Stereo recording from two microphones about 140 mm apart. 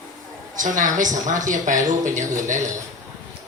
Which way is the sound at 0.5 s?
70° right (ahead or behind).